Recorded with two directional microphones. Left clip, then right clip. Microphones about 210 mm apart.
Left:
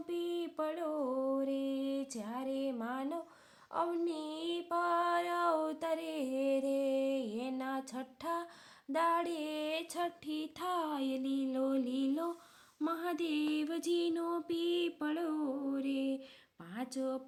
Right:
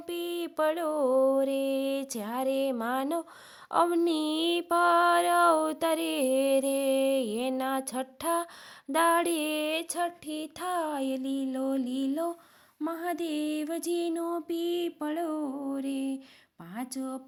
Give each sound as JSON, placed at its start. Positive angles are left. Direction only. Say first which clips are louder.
{"t": 0.1, "sound": "a sound", "louder": "right 5 dB", "side_deg": -50}
{"t": 8.9, "sound": "female singing", "louder": "right 8 dB", "side_deg": -45}
{"t": 12.8, "sound": "music", "louder": "right 4 dB", "side_deg": -30}
{"t": 16.7, "sound": "female singing", "louder": "right 2 dB", "side_deg": -30}